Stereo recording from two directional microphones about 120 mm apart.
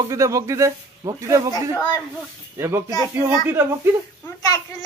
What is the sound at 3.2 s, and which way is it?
Speech, 20° right (ahead or behind).